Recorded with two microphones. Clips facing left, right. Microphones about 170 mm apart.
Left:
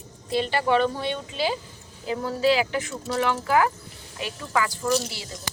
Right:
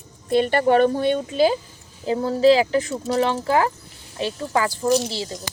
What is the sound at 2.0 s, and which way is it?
Speech, 30° right (ahead or behind).